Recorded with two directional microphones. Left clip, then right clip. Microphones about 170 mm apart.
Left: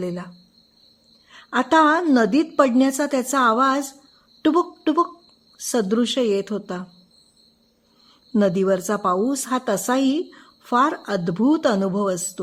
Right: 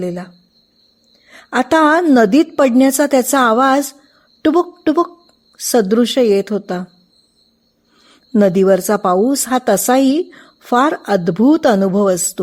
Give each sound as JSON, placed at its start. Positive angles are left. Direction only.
{"t": 0.0, "sound": "speech", "side_deg": -20}
{"t": 1.3, "sound": "a woman's voice", "side_deg": -30}
{"t": 8.3, "sound": "a woman's voice", "side_deg": -30}